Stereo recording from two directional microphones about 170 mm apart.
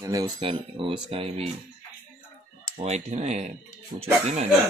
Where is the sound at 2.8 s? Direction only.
40° right (ahead or behind).